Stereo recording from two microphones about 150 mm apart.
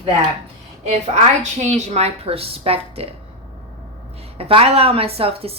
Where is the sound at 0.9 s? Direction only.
50° right (ahead or behind).